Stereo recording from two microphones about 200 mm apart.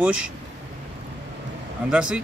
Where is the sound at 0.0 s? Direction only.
5° right (ahead or behind).